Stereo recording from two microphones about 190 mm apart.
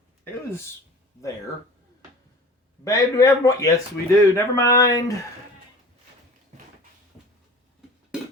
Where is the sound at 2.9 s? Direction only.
15° left (ahead or behind).